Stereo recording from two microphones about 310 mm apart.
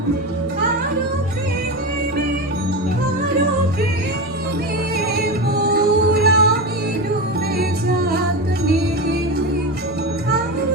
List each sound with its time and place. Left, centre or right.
4.9 s music: right
7.6 s music: right